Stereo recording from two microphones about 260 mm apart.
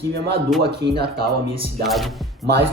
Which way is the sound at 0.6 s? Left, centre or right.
Right.